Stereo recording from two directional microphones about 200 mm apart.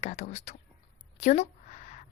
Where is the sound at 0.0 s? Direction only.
35° left (ahead or behind).